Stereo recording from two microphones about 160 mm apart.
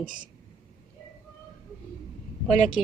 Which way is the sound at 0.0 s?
60° right (ahead or behind).